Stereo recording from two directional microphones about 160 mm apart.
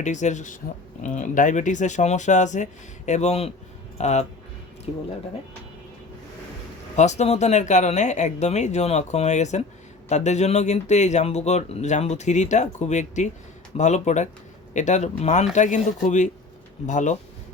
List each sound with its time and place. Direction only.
0.0 s a man's voice: 50° left (ahead or behind)
6.9 s a man's voice: 45° left (ahead or behind)